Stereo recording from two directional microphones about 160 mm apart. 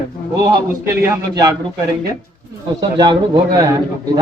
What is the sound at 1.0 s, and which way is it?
Speech, 15° right (ahead or behind).